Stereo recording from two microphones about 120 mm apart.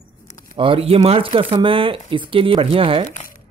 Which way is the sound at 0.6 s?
50° right (ahead or behind).